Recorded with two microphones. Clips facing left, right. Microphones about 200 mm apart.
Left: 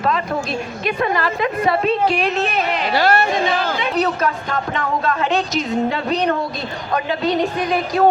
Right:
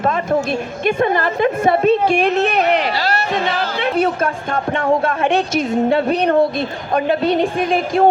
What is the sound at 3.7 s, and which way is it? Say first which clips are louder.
Speech: right 2 dB; 60° right (ahead or behind).